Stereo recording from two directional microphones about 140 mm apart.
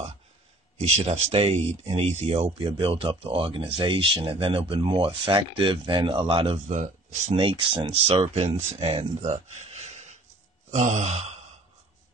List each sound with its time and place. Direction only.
0.7 s speech: 50° right (ahead or behind)
6.7 s speech: 60° right (ahead or behind)
7.8 s speech: 40° right (ahead or behind)
10.7 s sigh: 60° right (ahead or behind)